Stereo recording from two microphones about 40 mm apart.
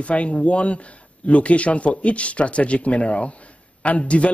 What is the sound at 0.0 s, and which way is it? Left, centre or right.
A woman's voice, left.